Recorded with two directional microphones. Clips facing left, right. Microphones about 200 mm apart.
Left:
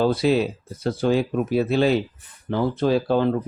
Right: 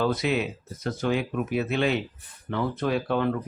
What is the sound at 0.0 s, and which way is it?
Speech, 30° left (ahead or behind).